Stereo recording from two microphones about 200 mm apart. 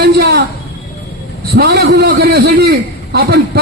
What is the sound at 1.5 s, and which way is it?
A man's voice, 50° right (ahead or behind).